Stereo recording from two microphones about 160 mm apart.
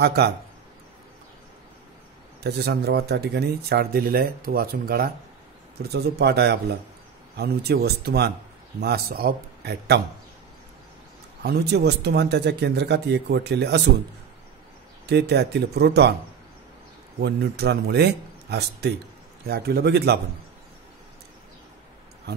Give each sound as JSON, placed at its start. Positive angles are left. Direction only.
{"t": 0.0, "sound": "speech", "side_deg": -90}
{"t": 2.4, "sound": "speech", "side_deg": -90}
{"t": 5.8, "sound": "speech", "side_deg": -90}
{"t": 8.8, "sound": "speech", "side_deg": -70}
{"t": 11.4, "sound": "speech", "side_deg": -90}
{"t": 15.0, "sound": "speech", "side_deg": -90}
{"t": 17.2, "sound": "speech", "side_deg": -90}
{"t": 19.4, "sound": "a man's voice", "side_deg": -75}